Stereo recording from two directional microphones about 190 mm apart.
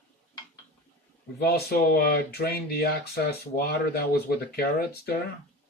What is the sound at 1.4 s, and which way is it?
Speech, 55° left (ahead or behind).